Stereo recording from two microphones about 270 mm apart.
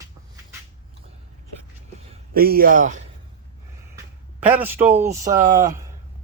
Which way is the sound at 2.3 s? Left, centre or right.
Right.